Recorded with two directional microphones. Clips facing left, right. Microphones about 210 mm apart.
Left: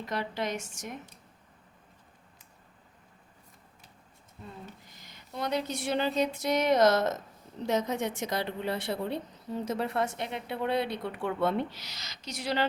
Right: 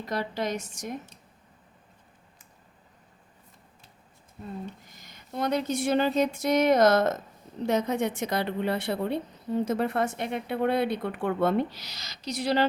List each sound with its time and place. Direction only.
0.0 s a woman's voice: 35° right (ahead or behind)
4.9 s a woman's voice: 50° right (ahead or behind)